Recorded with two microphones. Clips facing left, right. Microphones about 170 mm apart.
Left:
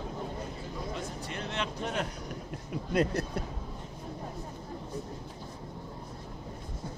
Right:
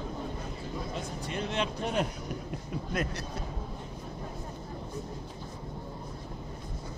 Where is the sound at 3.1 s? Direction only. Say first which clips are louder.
Left 5 dB; 55° left (ahead or behind).